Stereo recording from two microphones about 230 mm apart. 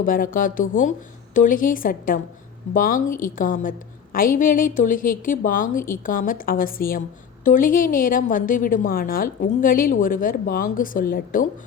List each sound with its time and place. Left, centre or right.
0.0 s a woman's voice: left